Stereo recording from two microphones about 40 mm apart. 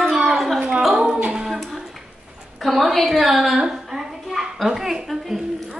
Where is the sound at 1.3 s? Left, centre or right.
Centre.